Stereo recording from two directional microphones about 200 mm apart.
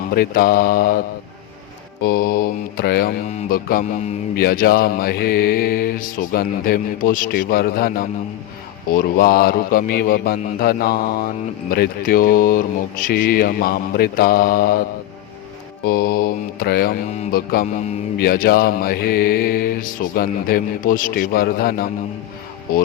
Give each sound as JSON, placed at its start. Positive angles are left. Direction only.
{"t": 0.1, "sound": "mantra", "side_deg": 50}